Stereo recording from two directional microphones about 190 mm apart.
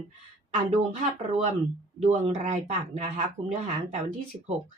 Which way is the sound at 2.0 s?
35° right (ahead or behind).